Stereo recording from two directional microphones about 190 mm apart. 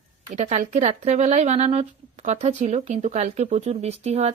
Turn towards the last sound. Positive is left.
turn(degrees=-35)  # may be behind; listen again after turning